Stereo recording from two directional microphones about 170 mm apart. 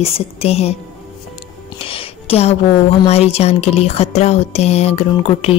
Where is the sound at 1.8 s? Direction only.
35° left (ahead or behind).